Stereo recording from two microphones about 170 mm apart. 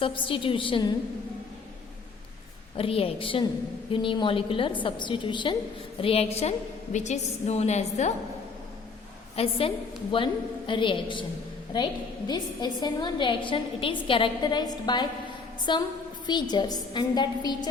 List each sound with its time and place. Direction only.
0.0 s a woman's voice: 30° left (ahead or behind)
2.7 s a woman's voice: 35° left (ahead or behind)
9.3 s a woman's voice: 35° left (ahead or behind)
12.3 s a woman's voice: 25° left (ahead or behind)